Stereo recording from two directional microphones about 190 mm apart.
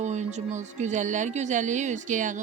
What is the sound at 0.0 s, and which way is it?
Speech, 40° right (ahead or behind).